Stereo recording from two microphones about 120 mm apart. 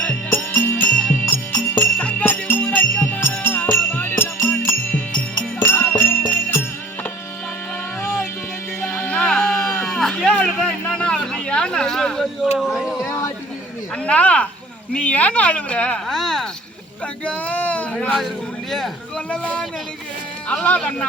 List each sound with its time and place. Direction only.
0.0 s music: 15° left (ahead or behind)
1.2 s music: 30° left (ahead or behind)
1.8 s music: 10° left (ahead or behind)
8.8 s sheep: 10° left (ahead or behind)
12.5 s a sound: centre (ahead or behind)
14.0 s a sound: 10° left (ahead or behind)
14.9 s speech: 10° left (ahead or behind)
17.2 s a man's voice: 10° left (ahead or behind)